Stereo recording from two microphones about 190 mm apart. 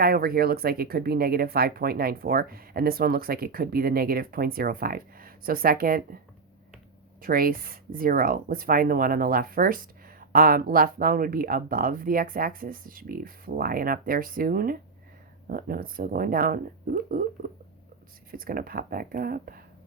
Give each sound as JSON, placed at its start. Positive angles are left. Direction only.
{"t": 0.0, "sound": "speech", "side_deg": -55}
{"t": 7.2, "sound": "speech", "side_deg": -50}
{"t": 18.3, "sound": "speech", "side_deg": -50}